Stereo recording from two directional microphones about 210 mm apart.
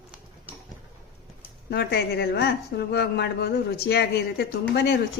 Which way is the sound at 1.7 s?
50° left (ahead or behind).